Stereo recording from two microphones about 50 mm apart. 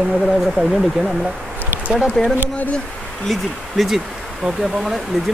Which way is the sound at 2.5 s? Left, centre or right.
Left.